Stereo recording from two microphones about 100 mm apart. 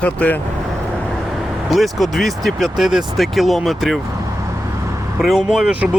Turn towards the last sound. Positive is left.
turn(degrees=-10)  # may be behind; listen again after turning